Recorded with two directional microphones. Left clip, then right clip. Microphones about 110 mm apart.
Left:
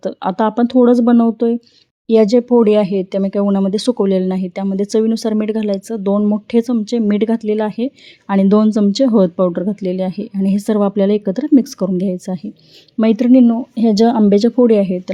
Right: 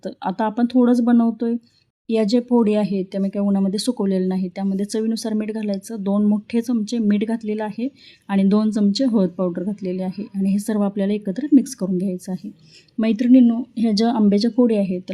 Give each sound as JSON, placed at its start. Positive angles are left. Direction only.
{"t": 0.0, "sound": "speech", "side_deg": 25}